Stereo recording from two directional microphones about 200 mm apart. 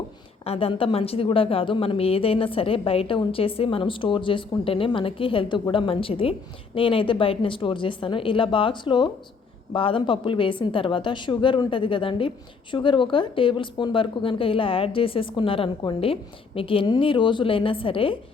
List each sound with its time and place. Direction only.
0.4 s a woman's voice: 30° left (ahead or behind)